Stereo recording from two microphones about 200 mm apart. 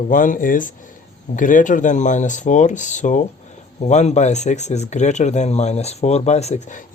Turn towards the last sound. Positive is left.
turn(degrees=35)  # may be behind; listen again after turning